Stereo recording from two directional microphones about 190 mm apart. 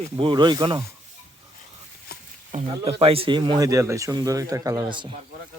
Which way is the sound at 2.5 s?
40° right (ahead or behind).